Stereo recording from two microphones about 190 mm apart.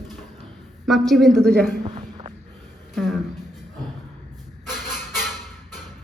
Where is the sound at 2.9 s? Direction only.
Centre (ahead or behind).